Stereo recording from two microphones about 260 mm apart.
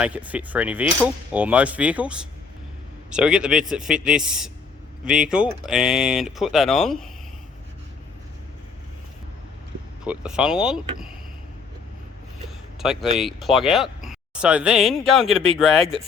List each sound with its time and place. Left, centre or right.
0.0 s speech: centre
10.0 s speech: centre
12.8 s speech: centre